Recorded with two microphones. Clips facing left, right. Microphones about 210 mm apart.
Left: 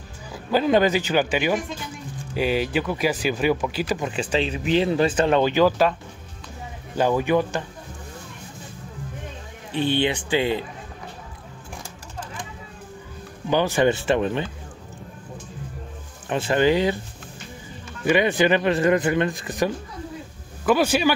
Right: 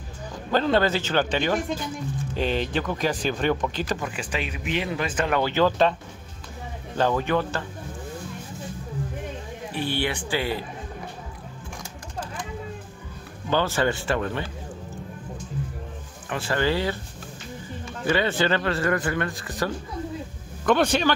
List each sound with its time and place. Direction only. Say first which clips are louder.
0.3 s speech: left 3 dB; 10° left (ahead or behind)
4.0 s speech: left 6 dB; 25° left (ahead or behind)
5.4 s speech: left 3 dB; 15° left (ahead or behind)
7.0 s speech: left 3 dB; 10° left (ahead or behind)
9.8 s speech: left 5 dB; 20° left (ahead or behind)
13.5 s speech: left 4 dB; 15° left (ahead or behind)
16.3 s speech: left 5 dB; 20° left (ahead or behind)
18.0 s speech: left 4 dB; 15° left (ahead or behind)
20.6 s speech: left 2 dB; 5° left (ahead or behind)